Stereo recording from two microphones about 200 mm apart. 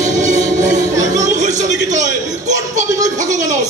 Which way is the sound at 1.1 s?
35° right (ahead or behind).